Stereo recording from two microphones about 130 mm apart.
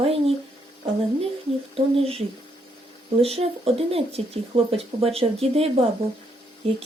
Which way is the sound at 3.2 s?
50° right (ahead or behind).